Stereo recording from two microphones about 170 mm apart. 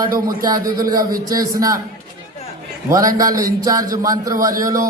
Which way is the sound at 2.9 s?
20° right (ahead or behind).